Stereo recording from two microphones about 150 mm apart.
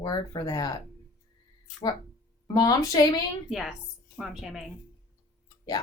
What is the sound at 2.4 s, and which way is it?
Speech, 25° left (ahead or behind).